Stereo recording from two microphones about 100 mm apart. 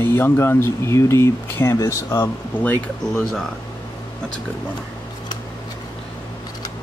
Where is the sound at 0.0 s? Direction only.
25° left (ahead or behind).